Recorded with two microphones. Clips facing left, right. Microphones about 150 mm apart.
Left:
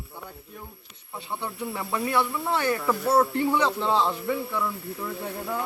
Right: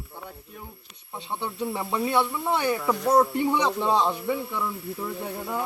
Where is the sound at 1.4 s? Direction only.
20° right (ahead or behind).